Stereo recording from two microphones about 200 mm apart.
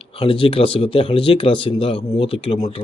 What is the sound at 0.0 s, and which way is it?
Speech, 25° left (ahead or behind).